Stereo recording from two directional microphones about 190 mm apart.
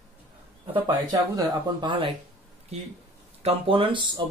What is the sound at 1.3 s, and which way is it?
Speech, 25° right (ahead or behind).